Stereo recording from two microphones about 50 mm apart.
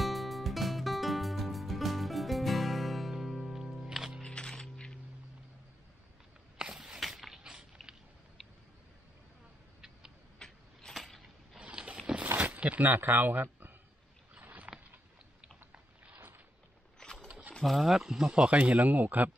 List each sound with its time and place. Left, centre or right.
0.0 s music: centre
4.2 s music: centre
6.6 s a sound: centre
7.8 s biting: centre
8.4 s tick-tock: centre
10.4 s mechanisms: centre
11.6 s boat: right
12.4 s speech: right
14.4 s a sound: right
17.0 s a sound: centre
17.3 s a sound: right
17.6 s speech: centre
18.3 s speech: right